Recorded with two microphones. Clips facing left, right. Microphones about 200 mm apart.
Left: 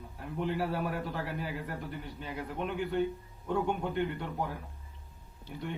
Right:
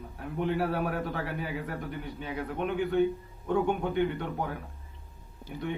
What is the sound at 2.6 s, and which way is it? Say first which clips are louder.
Speech: right 5 dB; 60° right (ahead or behind).